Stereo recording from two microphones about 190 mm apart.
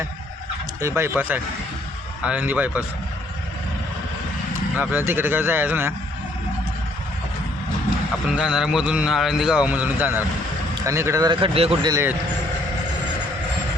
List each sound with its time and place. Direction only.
0.8 s a man's voice: 15° right (ahead or behind)
4.8 s a man's voice: 10° right (ahead or behind)
8.4 s a man's voice: 5° right (ahead or behind); by 11.7 s 30° right (ahead or behind)
11.8 s a man's voice: 15° right (ahead or behind)